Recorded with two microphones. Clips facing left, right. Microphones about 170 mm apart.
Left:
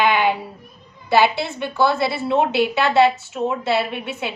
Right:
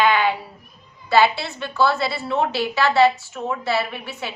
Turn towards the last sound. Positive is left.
turn(degrees=20)  # may be behind; listen again after turning